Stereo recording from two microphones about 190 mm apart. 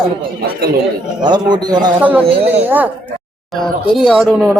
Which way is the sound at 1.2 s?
20° right (ahead or behind).